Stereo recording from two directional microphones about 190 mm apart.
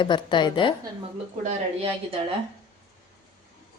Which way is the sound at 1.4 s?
35° right (ahead or behind).